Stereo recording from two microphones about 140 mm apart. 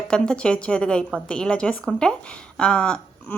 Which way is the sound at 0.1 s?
5° left (ahead or behind).